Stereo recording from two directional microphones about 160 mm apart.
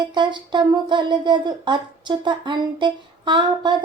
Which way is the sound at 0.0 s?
30° right (ahead or behind).